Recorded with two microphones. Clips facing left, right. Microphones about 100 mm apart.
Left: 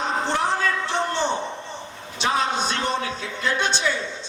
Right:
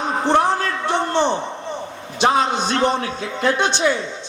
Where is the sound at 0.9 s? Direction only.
55° right (ahead or behind).